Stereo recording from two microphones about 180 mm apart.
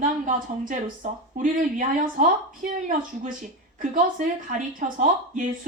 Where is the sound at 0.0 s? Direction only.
45° right (ahead or behind).